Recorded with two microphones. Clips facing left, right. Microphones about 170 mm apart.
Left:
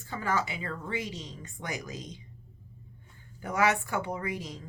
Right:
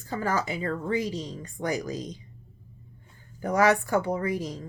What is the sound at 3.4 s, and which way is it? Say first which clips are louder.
Speech: right 5 dB; 40° right (ahead or behind).